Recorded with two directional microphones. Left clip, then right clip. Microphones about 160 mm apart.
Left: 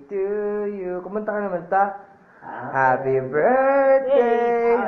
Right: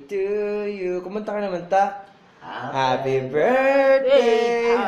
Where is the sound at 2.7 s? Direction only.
30° right (ahead or behind).